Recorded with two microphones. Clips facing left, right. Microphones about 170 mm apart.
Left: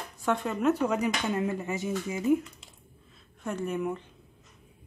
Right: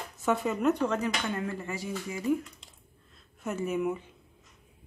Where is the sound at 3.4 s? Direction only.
5° right (ahead or behind).